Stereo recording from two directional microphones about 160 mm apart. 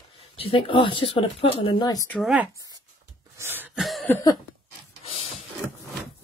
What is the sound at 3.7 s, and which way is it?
Cough, centre (ahead or behind).